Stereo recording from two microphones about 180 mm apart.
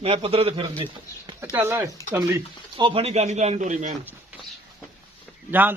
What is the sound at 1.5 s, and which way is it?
Speech, 15° right (ahead or behind).